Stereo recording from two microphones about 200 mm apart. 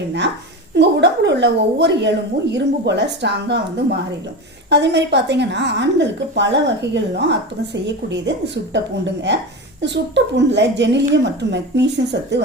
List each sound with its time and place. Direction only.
0.8 s a woman's voice: 60° right (ahead or behind)